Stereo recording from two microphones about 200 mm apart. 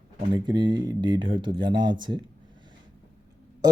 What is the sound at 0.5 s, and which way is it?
Speech, 25° right (ahead or behind).